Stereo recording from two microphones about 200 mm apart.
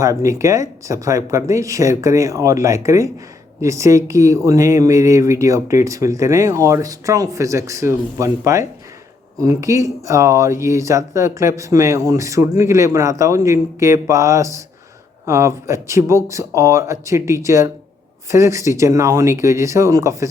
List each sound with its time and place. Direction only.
0.0 s speech: 15° right (ahead or behind)